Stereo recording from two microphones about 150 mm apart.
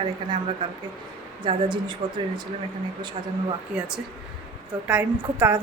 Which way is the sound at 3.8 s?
5° right (ahead or behind).